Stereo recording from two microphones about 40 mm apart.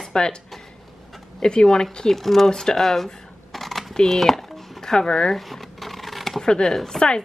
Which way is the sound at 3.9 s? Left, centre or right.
Centre.